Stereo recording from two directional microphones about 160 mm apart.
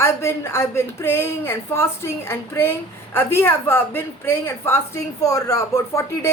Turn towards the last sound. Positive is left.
turn(degrees=15)  # may be behind; listen again after turning